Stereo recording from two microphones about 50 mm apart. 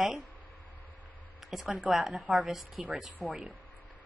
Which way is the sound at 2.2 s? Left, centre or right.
Right.